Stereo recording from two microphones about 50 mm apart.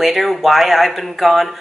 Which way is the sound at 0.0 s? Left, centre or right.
Centre.